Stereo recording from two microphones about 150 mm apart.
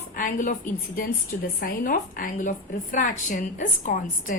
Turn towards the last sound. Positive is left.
turn(degrees=65)  # may be behind; listen again after turning